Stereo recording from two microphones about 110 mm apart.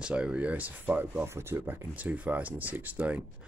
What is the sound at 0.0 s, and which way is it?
Speech, 10° right (ahead or behind).